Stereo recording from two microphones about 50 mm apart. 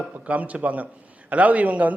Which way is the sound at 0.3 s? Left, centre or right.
Right.